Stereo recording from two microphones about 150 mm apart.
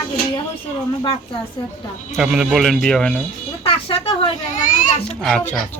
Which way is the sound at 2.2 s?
5° right (ahead or behind).